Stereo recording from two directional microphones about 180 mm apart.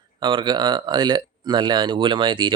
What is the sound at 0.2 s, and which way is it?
Speech, 25° right (ahead or behind).